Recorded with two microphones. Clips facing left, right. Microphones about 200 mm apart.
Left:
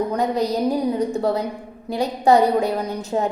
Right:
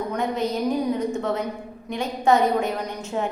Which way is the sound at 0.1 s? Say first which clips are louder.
Left 4 dB; 35° left (ahead or behind).